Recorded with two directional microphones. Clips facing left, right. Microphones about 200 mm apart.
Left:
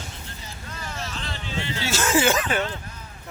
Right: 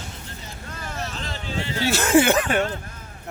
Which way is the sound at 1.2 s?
40° right (ahead or behind).